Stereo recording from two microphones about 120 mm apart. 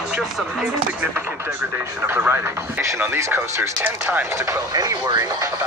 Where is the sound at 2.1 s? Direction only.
20° right (ahead or behind).